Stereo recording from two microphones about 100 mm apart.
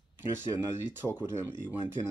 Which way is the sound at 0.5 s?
20° right (ahead or behind).